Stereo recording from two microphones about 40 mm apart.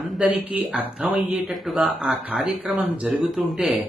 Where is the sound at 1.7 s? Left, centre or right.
Centre.